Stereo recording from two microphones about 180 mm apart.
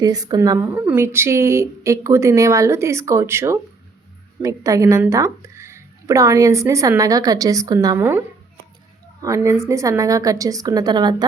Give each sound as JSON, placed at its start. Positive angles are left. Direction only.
{"t": 0.0, "sound": "a woman's voice", "side_deg": -20}
{"t": 9.2, "sound": "a woman's voice", "side_deg": -15}